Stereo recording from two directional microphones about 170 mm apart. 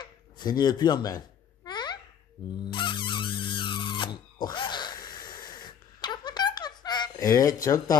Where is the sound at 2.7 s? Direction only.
30° left (ahead or behind).